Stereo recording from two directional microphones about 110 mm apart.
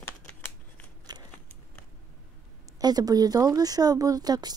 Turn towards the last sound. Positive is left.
turn(degrees=-35)  # may be behind; listen again after turning